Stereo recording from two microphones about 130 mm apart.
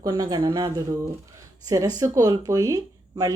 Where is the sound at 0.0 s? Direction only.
30° right (ahead or behind).